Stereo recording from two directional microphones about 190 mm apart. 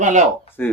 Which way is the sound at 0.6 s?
10° left (ahead or behind).